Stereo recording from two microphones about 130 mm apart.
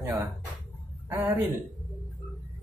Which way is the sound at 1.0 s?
15° right (ahead or behind).